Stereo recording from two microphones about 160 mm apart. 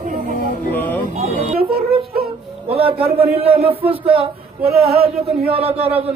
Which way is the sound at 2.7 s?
35° right (ahead or behind).